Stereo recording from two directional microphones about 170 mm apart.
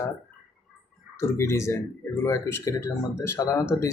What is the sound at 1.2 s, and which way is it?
Speech, 15° left (ahead or behind).